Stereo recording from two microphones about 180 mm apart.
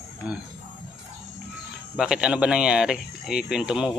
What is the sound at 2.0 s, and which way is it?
Speech, 5° right (ahead or behind).